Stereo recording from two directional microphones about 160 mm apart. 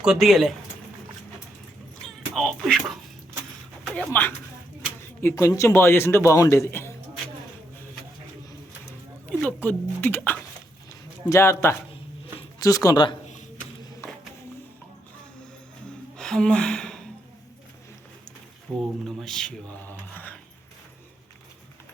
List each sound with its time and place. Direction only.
0.0 s speech: 5° right (ahead or behind)
2.0 s music: 5° left (ahead or behind)
3.8 s speech: 5° left (ahead or behind)
5.2 s a man's voice: 20° left (ahead or behind)
9.4 s a man's voice: 10° left (ahead or behind); by 13.1 s 25° left (ahead or behind)
16.1 s a sound: 5° left (ahead or behind)
18.8 s a man's voice: centre (ahead or behind)